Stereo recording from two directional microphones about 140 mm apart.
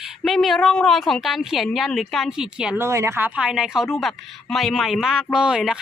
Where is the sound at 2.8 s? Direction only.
20° right (ahead or behind).